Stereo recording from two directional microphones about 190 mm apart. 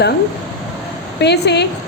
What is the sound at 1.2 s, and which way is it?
Speech, 60° left (ahead or behind).